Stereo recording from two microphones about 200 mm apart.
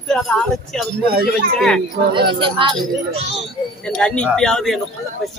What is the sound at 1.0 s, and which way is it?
Speech, 50° right (ahead or behind).